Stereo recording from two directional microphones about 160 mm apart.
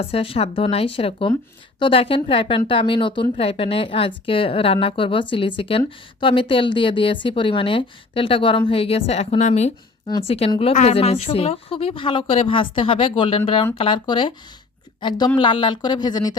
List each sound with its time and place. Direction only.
0.0 s a woman's voice: 35° left (ahead or behind)